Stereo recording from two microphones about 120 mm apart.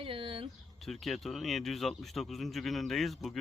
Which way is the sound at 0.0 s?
45° right (ahead or behind).